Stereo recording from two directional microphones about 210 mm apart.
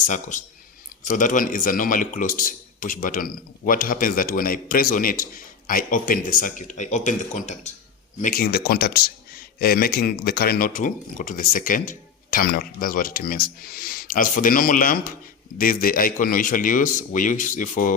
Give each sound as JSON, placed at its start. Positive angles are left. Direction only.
{"t": 0.0, "sound": "speech", "side_deg": 35}